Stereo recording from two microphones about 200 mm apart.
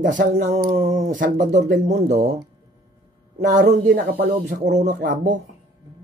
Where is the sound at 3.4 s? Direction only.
40° right (ahead or behind).